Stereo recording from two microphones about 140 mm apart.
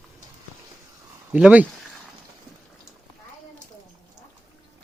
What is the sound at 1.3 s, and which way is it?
Speech, 10° right (ahead or behind).